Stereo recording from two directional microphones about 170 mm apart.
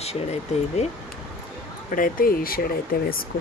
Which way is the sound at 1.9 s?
55° left (ahead or behind).